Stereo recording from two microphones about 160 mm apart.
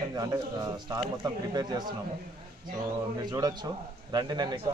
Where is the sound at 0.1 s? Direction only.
25° right (ahead or behind).